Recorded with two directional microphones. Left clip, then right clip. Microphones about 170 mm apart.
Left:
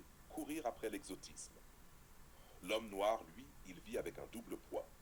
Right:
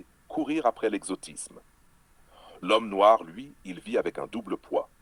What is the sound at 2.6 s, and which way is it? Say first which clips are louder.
Speech: right 18 dB; 50° right (ahead or behind).